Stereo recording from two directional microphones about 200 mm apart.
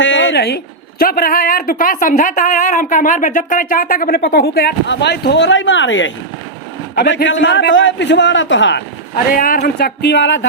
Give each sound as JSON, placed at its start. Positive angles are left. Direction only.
{"t": 0.0, "sound": "a man's voice", "side_deg": 70}
{"t": 6.9, "sound": "a man's voice", "side_deg": 50}
{"t": 9.3, "sound": "a man's voice", "side_deg": 45}